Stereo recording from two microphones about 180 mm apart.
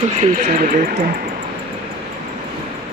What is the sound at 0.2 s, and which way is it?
Speech, 40° right (ahead or behind).